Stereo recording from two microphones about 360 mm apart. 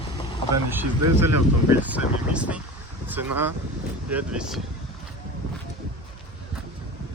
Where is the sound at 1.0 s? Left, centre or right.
Right.